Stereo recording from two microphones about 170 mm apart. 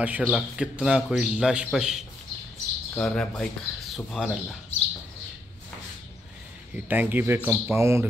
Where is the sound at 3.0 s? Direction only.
5° left (ahead or behind).